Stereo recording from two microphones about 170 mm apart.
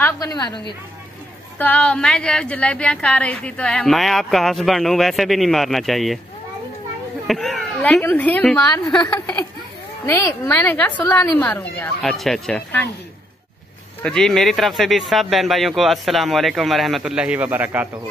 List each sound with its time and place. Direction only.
0.0 s a woman's voice: 20° left (ahead or behind)
1.6 s a woman's voice: 5° left (ahead or behind)
7.2 s a woman's voice: centre (ahead or behind)
9.0 s a woman's voice: 25° left (ahead or behind); by 12.8 s 5° left (ahead or behind)
14.0 s a woman's voice: 5° left (ahead or behind)